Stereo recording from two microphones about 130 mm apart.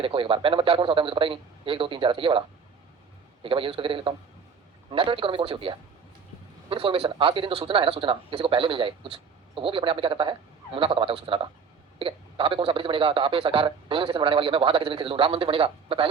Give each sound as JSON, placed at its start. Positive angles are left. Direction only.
{"t": 0.0, "sound": "speech", "side_deg": -45}
{"t": 3.4, "sound": "a man's voice", "side_deg": -45}